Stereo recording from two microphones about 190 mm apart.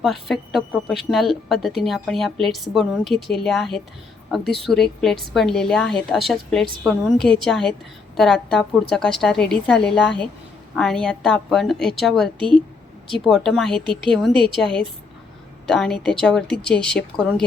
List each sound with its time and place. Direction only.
0.0 s a woman's voice: centre (ahead or behind)
13.8 s a woman's voice: 25° right (ahead or behind)
14.5 s a woman's voice: centre (ahead or behind)